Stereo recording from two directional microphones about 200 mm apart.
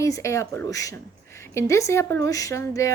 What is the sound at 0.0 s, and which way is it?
Speech, 15° left (ahead or behind).